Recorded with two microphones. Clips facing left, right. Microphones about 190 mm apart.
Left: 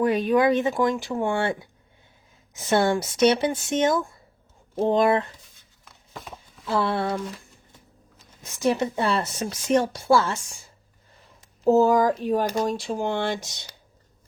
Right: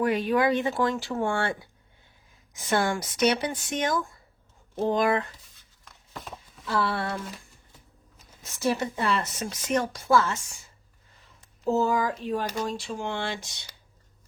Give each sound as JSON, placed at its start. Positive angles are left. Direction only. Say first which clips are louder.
{"t": 0.0, "sound": "speech", "louder": "left 4 dB", "side_deg": 20}
{"t": 5.8, "sound": "a sound", "louder": "left 1 dB", "side_deg": 5}
{"t": 6.7, "sound": "speech", "louder": "left 4 dB", "side_deg": 25}
{"t": 8.5, "sound": "speech", "louder": "left 4 dB", "side_deg": 20}
{"t": 9.0, "sound": "speech", "louder": "left 3 dB", "side_deg": 30}
{"t": 11.6, "sound": "speech", "louder": "left 7 dB", "side_deg": 40}